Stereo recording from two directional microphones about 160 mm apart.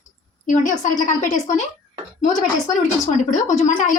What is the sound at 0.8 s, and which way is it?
Speech, 50° left (ahead or behind).